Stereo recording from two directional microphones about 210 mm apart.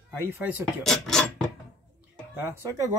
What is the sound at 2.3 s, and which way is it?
Speech, 10° right (ahead or behind).